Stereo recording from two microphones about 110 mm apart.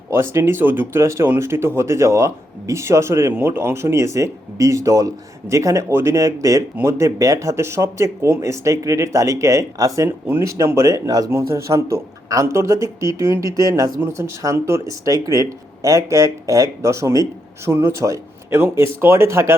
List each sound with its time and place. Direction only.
0.1 s speech: 20° right (ahead or behind)